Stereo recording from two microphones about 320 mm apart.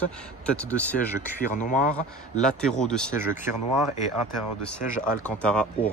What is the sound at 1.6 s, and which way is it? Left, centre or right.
Speech, left.